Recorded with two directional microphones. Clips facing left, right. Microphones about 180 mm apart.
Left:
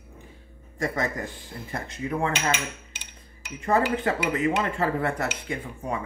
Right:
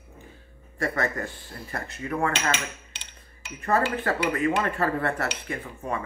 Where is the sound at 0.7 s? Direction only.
15° left (ahead or behind).